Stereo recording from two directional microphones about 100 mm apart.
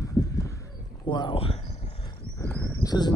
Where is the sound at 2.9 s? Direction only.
45° left (ahead or behind).